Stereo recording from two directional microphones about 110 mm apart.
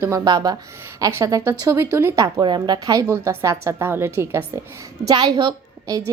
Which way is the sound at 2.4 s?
40° right (ahead or behind).